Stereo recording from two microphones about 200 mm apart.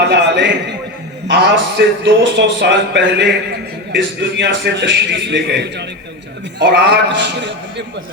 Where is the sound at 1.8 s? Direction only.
55° right (ahead or behind).